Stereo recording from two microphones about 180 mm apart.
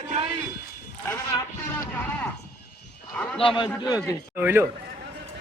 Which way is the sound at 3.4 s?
25° left (ahead or behind).